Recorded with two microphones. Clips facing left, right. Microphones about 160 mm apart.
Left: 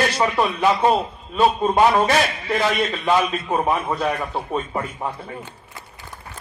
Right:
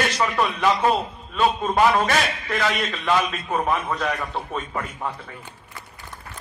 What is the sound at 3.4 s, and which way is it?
A man's voice, 30° left (ahead or behind).